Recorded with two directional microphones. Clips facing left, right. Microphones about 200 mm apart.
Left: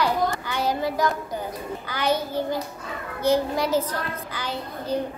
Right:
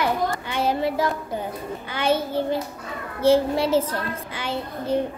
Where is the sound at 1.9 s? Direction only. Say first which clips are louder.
Right 2 dB; 25° right (ahead or behind).